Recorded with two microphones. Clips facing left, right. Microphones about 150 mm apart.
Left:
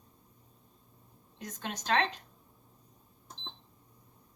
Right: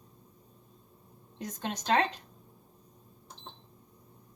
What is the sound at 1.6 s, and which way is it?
Speech, 30° right (ahead or behind).